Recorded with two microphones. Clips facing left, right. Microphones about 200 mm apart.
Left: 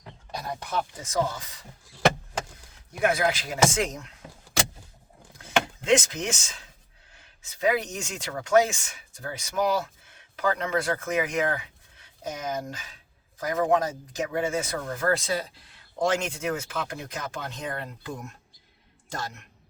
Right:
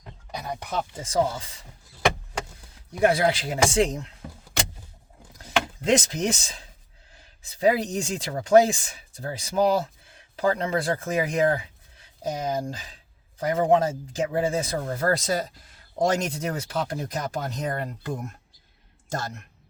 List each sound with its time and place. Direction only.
0.3 s speech: 15° right (ahead or behind)
3.0 s speech: 30° right (ahead or behind)
5.4 s a sound: 35° right (ahead or behind)
7.4 s speech: 35° right (ahead or behind)